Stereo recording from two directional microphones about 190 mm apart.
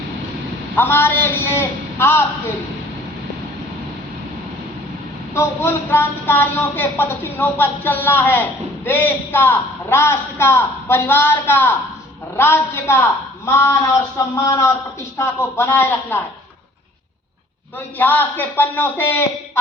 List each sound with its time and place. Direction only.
0.8 s a woman's voice: 10° left (ahead or behind)
5.3 s a woman's voice: 15° left (ahead or behind)
17.9 s a woman's voice: 10° left (ahead or behind)